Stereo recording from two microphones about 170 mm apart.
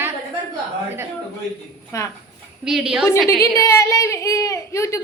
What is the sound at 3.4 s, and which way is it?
A woman's voice, 15° left (ahead or behind).